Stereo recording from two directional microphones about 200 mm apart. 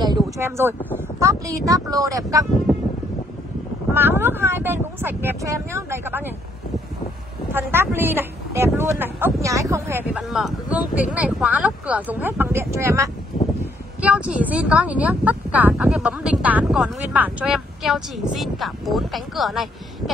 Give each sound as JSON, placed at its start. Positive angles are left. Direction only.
{"t": 0.0, "sound": "speech", "side_deg": -15}
{"t": 3.9, "sound": "speech", "side_deg": -10}
{"t": 7.5, "sound": "speech", "side_deg": -10}